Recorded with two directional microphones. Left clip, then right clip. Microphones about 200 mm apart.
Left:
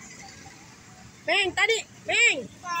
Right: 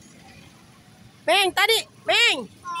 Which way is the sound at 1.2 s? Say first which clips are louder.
Right 4 dB; 25° right (ahead or behind).